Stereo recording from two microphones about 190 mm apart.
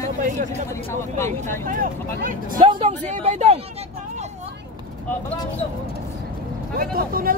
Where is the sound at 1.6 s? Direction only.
45° right (ahead or behind).